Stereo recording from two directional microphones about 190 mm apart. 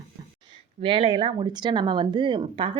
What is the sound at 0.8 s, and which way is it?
Speech, 25° right (ahead or behind).